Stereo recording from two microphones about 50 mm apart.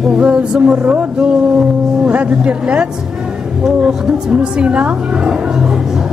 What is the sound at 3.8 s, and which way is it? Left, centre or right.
Speech, centre.